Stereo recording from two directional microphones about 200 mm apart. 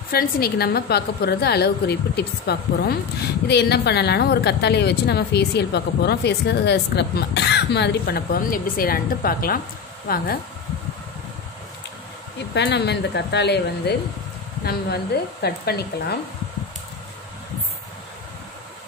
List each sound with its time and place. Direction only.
0.1 s a woman's voice: 50° left (ahead or behind)
12.5 s a woman's voice: 55° left (ahead or behind)